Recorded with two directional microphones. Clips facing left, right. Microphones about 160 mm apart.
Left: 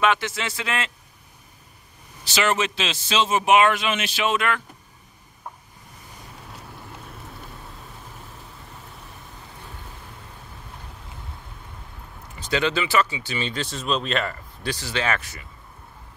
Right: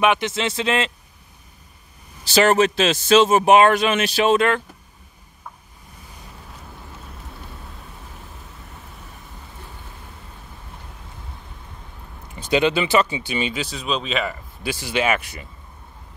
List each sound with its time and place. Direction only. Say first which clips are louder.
0.0 s speech: right 3 dB; 20° right (ahead or behind)
2.2 s a man's voice: right 7 dB; 40° right (ahead or behind)
12.4 s speech: right 5 dB; 15° right (ahead or behind)